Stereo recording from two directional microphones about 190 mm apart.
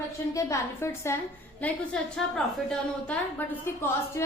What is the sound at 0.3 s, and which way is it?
Speech, 15° left (ahead or behind).